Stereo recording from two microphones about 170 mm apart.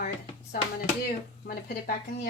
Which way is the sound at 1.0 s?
60° left (ahead or behind).